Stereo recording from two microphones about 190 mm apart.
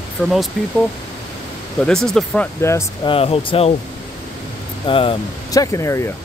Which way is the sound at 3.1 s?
30° left (ahead or behind).